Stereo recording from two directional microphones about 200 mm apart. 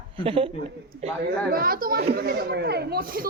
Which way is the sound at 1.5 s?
45° right (ahead or behind).